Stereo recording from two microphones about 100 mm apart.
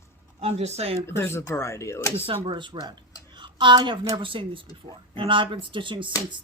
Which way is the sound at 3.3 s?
50° right (ahead or behind).